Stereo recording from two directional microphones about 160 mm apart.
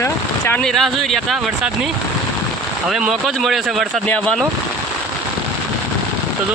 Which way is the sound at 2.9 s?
5° right (ahead or behind).